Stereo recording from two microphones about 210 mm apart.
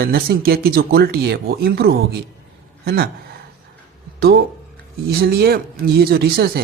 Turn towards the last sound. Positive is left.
turn(degrees=-45)  # may be behind; listen again after turning